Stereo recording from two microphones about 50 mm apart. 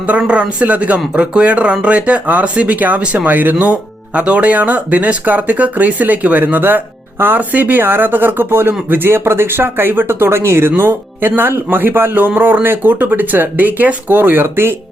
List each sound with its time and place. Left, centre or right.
0.1 s speech: right
3.0 s speech: right
3.2 s speech: right
10.7 s speech: right